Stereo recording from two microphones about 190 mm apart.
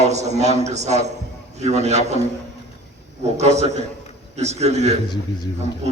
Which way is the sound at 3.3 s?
35° right (ahead or behind).